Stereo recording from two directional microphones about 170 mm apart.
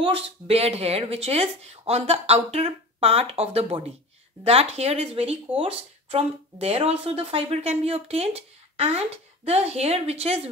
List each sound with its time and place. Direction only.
0.0 s speech: 35° right (ahead or behind)